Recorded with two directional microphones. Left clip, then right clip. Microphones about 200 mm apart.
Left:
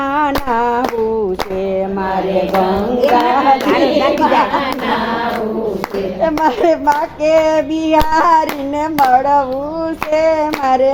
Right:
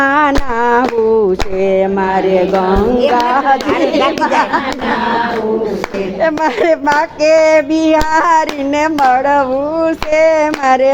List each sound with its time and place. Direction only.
0.0 s humming: 20° right (ahead or behind)
1.6 s a child's voice: 20° right (ahead or behind)
6.2 s a child's voice: 20° right (ahead or behind)